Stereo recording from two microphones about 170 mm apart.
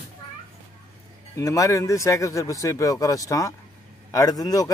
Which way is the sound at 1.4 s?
20° left (ahead or behind).